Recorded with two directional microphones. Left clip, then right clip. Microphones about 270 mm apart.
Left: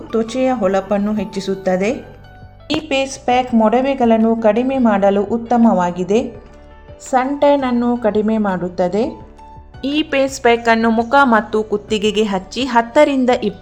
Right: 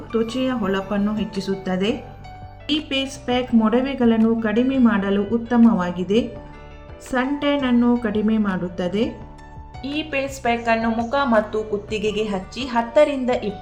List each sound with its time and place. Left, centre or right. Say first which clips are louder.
0.1 s speech: left 6 dB; centre
9.8 s a woman's voice: left 8 dB; left